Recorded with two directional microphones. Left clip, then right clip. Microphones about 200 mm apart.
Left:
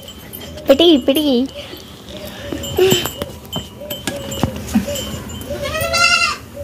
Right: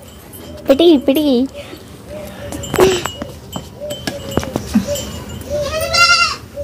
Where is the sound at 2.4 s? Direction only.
5° right (ahead or behind).